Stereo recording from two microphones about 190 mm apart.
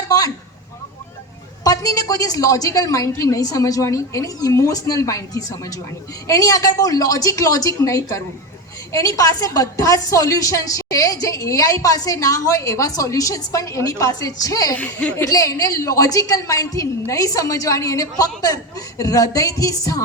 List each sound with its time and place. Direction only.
1.6 s a woman's voice: 20° left (ahead or behind)
14.8 s a woman's voice: 10° left (ahead or behind)